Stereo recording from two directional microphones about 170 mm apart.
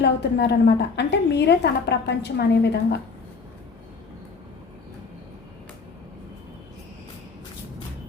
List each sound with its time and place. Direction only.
0.0 s a woman's voice: 90° left